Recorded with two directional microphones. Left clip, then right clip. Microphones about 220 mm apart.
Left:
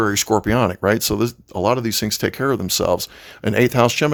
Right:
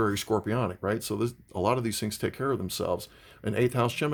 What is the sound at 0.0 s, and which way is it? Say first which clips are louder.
Speech: left 9 dB; 30° left (ahead or behind).